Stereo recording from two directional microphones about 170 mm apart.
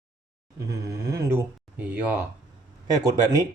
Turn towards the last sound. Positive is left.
turn(degrees=-20)  # may be behind; listen again after turning